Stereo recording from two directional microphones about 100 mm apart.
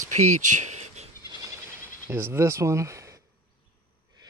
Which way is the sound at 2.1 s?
25° right (ahead or behind).